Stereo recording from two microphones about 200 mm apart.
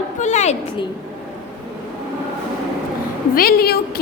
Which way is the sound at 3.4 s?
50° left (ahead or behind).